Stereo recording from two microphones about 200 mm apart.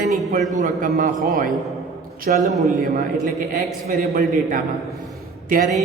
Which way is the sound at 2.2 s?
45° right (ahead or behind).